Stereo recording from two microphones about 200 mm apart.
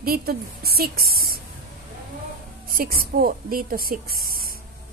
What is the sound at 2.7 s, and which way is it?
A woman's voice, 50° right (ahead or behind).